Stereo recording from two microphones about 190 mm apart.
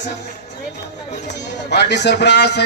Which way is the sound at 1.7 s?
60° left (ahead or behind).